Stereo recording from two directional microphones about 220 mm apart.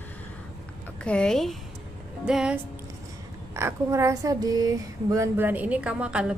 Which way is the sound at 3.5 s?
10° right (ahead or behind).